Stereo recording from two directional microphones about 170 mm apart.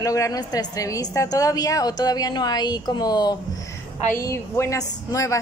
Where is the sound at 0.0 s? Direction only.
20° left (ahead or behind).